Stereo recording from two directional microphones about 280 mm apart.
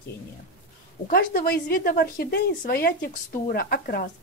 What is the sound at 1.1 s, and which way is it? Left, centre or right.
A woman's voice, left.